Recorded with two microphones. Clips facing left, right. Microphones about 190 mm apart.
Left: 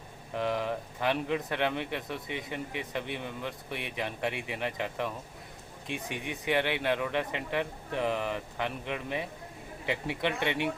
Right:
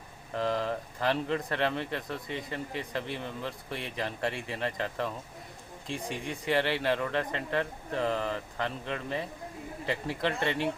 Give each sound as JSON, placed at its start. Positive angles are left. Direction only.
{"t": 0.3, "sound": "speech", "side_deg": 5}
{"t": 5.9, "sound": "speech", "side_deg": 65}
{"t": 6.2, "sound": "a man's voice", "side_deg": 5}